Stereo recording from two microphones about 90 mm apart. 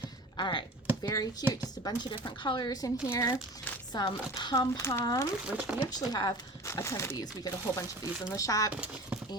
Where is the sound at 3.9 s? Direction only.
50° left (ahead or behind).